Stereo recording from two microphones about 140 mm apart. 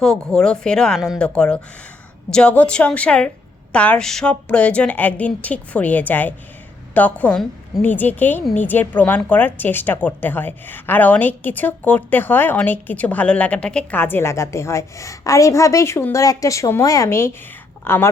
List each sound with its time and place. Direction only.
0.0 s a woman's voice: 5° left (ahead or behind)